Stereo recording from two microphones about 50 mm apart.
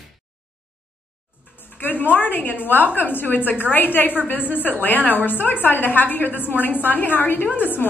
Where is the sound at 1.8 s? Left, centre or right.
Left.